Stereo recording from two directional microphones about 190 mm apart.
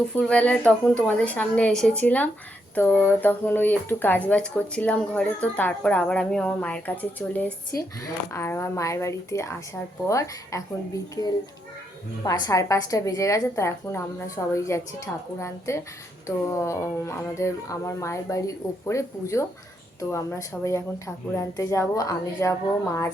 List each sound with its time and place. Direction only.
0.2 s speech: 5° left (ahead or behind)